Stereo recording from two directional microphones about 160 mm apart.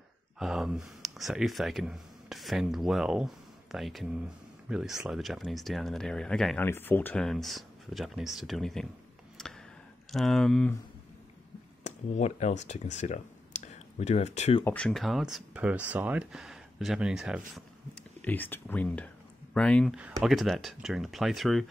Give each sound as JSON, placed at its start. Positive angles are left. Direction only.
{"t": 0.4, "sound": "speech", "side_deg": -5}
{"t": 9.4, "sound": "a sound", "side_deg": 5}
{"t": 10.1, "sound": "speech", "side_deg": 0}
{"t": 11.8, "sound": "speech", "side_deg": 45}
{"t": 14.6, "sound": "speech", "side_deg": 10}
{"t": 18.2, "sound": "speech", "side_deg": 10}
{"t": 19.9, "sound": "speech", "side_deg": -5}